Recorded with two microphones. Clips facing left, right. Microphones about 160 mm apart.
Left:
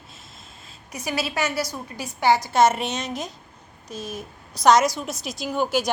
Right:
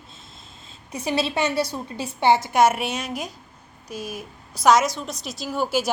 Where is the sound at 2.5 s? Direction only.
10° right (ahead or behind).